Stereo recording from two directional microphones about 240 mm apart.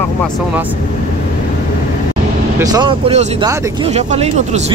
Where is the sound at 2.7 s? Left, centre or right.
Right.